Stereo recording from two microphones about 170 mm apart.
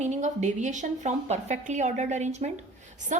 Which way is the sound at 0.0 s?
45° right (ahead or behind).